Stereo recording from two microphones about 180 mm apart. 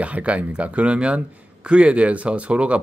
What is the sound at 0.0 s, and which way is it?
Speech, 5° right (ahead or behind).